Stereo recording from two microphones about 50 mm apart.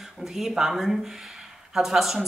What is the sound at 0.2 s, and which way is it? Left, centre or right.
Speech, centre.